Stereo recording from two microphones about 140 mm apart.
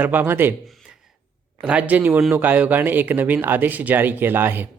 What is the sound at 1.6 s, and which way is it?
A man's voice, 10° right (ahead or behind).